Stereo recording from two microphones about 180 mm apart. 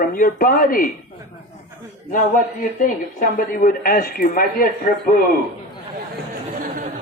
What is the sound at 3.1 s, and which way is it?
Speech, 50° left (ahead or behind).